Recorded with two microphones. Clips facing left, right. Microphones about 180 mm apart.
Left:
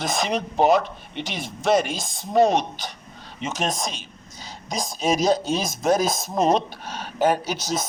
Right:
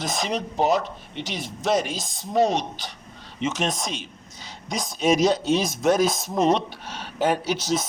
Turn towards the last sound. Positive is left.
turn(degrees=45)  # may be behind; listen again after turning